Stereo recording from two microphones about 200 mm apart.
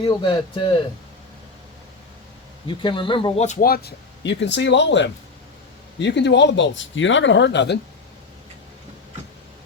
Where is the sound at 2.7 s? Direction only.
25° left (ahead or behind).